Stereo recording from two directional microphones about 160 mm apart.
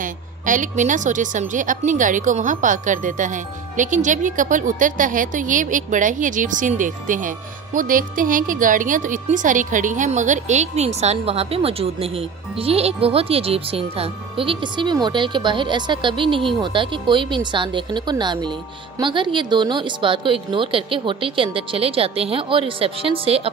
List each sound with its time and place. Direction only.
0.0 s a woman's voice: 55° right (ahead or behind); by 23.5 s 35° right (ahead or behind)